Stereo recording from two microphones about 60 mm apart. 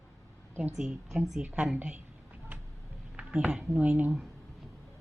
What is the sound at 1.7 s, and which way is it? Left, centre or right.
Speech, right.